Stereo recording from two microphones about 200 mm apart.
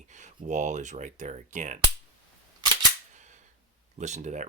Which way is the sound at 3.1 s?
35° right (ahead or behind).